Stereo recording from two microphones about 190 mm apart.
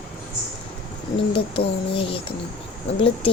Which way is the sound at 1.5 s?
30° left (ahead or behind).